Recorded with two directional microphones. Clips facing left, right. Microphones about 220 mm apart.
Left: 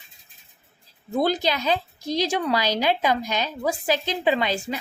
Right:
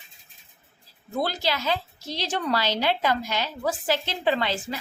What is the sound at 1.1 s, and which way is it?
A woman's voice, 15° left (ahead or behind).